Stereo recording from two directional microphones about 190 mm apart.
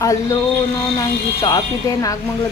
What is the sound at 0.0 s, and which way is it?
Speech, 15° left (ahead or behind).